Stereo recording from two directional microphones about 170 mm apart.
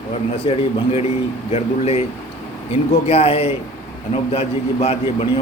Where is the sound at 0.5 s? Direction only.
30° left (ahead or behind).